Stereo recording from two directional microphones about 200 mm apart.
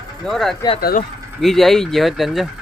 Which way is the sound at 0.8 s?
50° left (ahead or behind).